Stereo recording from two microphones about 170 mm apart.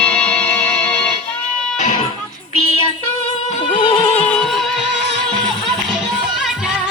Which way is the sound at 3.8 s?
25° left (ahead or behind).